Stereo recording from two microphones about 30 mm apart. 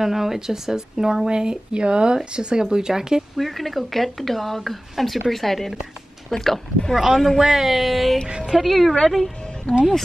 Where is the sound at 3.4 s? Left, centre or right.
Centre.